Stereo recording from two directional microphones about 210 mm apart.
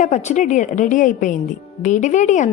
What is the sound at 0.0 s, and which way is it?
A woman's voice, 35° left (ahead or behind).